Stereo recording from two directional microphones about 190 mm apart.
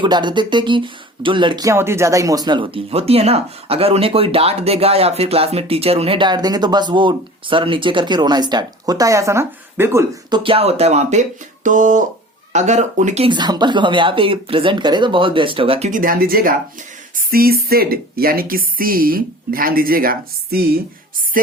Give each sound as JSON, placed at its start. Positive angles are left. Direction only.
{"t": 0.0, "sound": "speech", "side_deg": -25}
{"t": 13.2, "sound": "speech", "side_deg": -25}
{"t": 15.9, "sound": "a woman's voice", "side_deg": -45}